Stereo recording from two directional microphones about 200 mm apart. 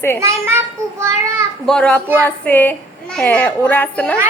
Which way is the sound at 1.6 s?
5° left (ahead or behind).